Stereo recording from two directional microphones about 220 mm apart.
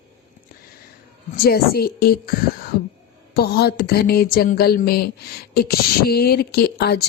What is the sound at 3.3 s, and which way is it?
A woman's voice, 45° left (ahead or behind).